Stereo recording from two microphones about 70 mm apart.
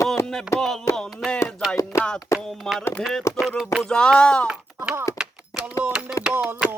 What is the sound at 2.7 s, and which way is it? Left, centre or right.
Speech, centre.